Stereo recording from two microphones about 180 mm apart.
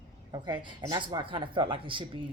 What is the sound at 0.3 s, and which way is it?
Speech, 25° right (ahead or behind).